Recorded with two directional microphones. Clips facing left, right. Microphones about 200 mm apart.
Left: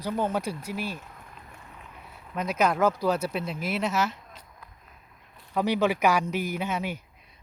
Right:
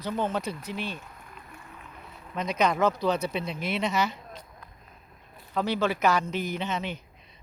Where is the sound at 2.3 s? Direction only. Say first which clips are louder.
Left 1 dB; 5° left (ahead or behind).